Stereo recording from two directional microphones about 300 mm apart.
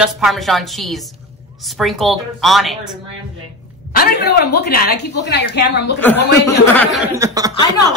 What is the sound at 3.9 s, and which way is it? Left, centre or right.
A woman's voice, left.